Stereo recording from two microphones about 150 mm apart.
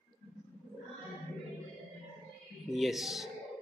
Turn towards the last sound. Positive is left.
turn(degrees=0)  # may be behind; listen again after turning